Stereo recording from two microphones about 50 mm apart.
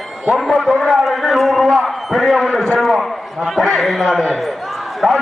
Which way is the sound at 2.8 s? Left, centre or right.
Centre.